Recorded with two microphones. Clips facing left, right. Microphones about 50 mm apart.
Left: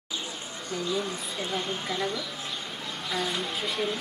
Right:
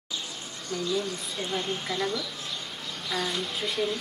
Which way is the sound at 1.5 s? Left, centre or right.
Centre.